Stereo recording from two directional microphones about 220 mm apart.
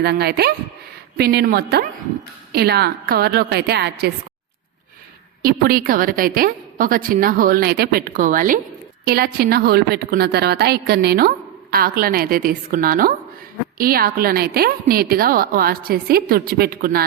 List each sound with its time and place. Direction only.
0.0 s a woman's voice: 45° right (ahead or behind)
5.4 s a woman's voice: 40° right (ahead or behind)